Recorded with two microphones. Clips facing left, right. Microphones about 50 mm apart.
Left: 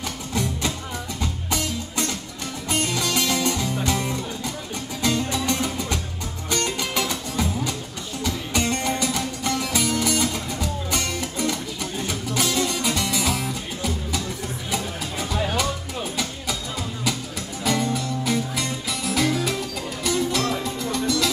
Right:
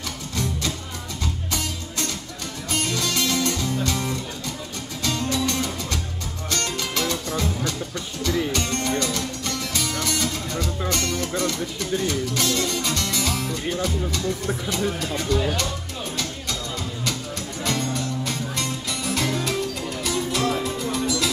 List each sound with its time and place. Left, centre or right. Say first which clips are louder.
0.3 s music: left 2 dB; centre
17.6 s music: left 3 dB; centre